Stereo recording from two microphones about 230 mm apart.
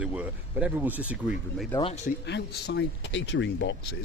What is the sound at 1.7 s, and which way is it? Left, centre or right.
Speech, left.